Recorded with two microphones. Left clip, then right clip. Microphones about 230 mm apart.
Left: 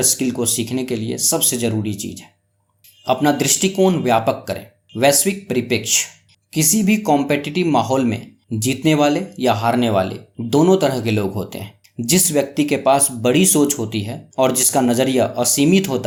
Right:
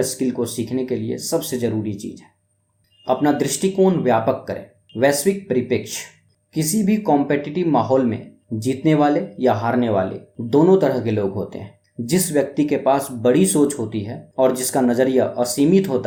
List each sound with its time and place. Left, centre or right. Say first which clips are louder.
0.1 s speech: left 3 dB; left